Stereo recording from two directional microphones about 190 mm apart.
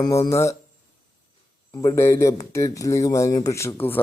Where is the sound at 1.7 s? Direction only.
20° left (ahead or behind).